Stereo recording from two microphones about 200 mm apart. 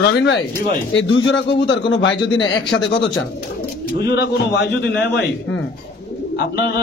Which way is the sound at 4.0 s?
55° left (ahead or behind).